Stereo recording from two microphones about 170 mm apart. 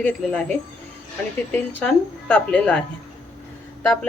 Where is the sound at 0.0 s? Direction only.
5° left (ahead or behind).